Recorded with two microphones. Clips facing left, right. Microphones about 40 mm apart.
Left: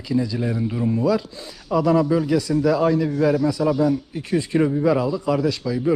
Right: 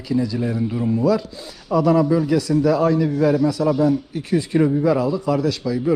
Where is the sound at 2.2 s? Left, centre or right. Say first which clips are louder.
Right 1 dB; right.